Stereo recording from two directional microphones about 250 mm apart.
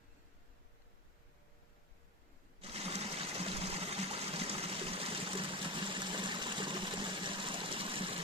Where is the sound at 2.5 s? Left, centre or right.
Right.